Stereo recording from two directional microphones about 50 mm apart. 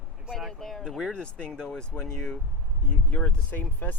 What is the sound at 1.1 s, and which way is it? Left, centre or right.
Speech, centre.